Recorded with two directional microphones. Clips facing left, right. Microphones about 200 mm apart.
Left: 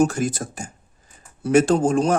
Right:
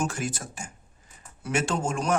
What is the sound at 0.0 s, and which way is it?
Speech, 40° left (ahead or behind).